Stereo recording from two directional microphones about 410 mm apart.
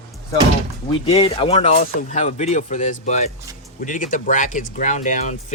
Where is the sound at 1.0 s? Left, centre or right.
Centre.